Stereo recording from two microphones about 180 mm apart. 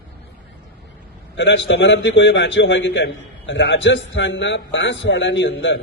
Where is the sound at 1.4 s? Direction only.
85° left.